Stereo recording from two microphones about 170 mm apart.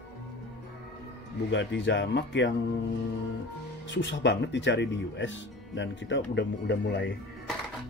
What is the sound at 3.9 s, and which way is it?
Speech, 90° left.